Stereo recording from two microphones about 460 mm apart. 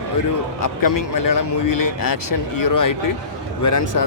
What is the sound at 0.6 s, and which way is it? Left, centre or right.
Speech, left.